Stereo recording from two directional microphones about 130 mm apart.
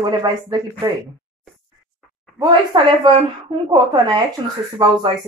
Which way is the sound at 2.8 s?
40° right (ahead or behind).